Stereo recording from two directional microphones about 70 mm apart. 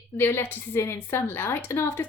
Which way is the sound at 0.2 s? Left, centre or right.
Left.